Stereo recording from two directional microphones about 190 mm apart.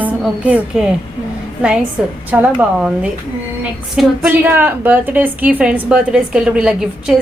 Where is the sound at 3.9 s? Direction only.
5° right (ahead or behind).